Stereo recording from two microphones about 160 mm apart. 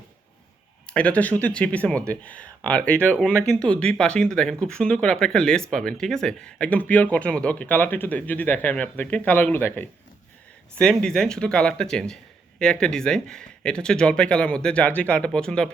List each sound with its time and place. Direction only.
0.9 s a man's voice: 10° left (ahead or behind)